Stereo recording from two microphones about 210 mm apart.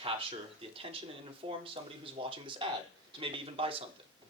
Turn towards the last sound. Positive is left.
turn(degrees=-25)  # may be behind; listen again after turning